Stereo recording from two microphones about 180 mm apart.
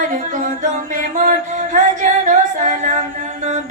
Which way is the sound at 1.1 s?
45° right (ahead or behind).